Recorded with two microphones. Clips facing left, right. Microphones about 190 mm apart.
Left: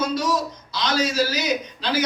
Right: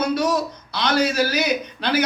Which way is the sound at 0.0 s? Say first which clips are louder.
Right 2 dB; 60° right (ahead or behind).